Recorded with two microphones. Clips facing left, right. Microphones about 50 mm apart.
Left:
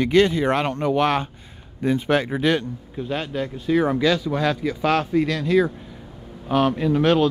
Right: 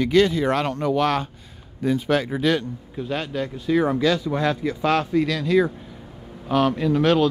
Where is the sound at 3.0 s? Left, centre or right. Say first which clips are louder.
Even; centre.